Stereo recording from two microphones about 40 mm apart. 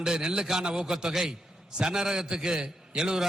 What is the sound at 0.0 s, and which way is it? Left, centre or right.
A man's voice, centre.